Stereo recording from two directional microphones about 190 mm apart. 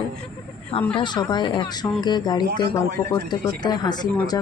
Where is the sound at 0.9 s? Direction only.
25° left (ahead or behind).